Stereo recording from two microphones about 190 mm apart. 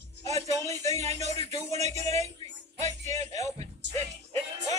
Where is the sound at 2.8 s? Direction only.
35° right (ahead or behind).